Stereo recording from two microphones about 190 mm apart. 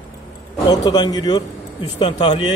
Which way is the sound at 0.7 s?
20° left (ahead or behind).